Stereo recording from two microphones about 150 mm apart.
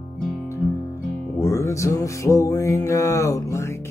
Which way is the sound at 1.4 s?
20° left (ahead or behind).